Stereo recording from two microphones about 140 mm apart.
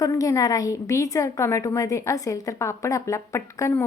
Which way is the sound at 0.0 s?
25° left (ahead or behind).